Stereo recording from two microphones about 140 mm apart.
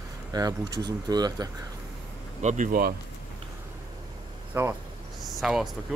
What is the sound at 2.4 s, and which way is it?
Speech, 65° right (ahead or behind).